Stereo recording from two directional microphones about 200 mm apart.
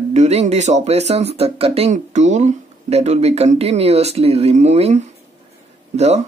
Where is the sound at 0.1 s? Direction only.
35° right (ahead or behind).